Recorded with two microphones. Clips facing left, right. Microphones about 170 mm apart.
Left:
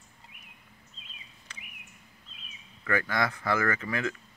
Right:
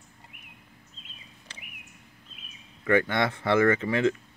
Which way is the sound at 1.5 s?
30° right (ahead or behind).